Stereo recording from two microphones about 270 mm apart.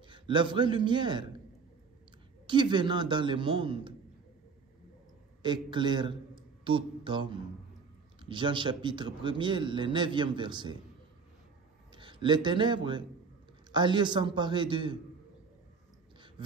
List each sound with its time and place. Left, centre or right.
0.1 s a man's voice: centre
2.4 s a man's voice: centre
5.4 s a man's voice: centre
11.9 s a man's voice: centre